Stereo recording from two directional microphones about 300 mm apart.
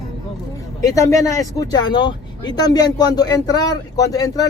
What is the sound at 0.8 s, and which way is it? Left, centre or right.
Speech, centre.